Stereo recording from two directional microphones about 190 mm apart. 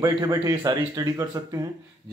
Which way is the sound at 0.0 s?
20° right (ahead or behind).